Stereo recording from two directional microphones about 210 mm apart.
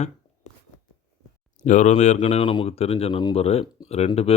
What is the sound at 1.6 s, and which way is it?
Speech, 35° left (ahead or behind).